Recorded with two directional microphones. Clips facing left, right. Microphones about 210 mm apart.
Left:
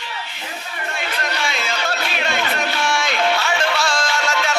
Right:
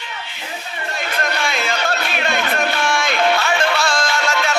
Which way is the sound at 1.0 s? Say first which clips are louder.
Right 3 dB; 50° right (ahead or behind).